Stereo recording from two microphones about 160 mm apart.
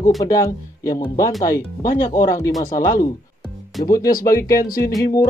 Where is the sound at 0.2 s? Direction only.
20° left (ahead or behind).